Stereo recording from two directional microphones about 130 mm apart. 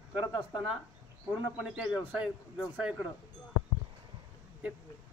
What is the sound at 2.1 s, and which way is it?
Speech, 5° right (ahead or behind).